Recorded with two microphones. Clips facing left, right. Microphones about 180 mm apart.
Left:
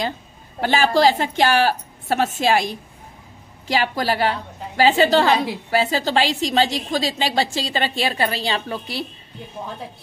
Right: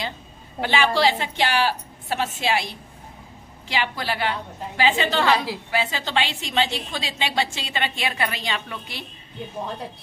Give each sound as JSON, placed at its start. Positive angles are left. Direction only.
{"t": 0.6, "sound": "a woman's voice", "side_deg": 40}
{"t": 5.3, "sound": "a woman's voice", "side_deg": 20}
{"t": 5.7, "sound": "a woman's voice", "side_deg": 40}